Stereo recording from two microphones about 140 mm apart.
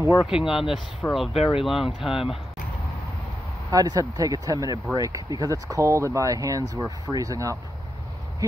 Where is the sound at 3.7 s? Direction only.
25° right (ahead or behind).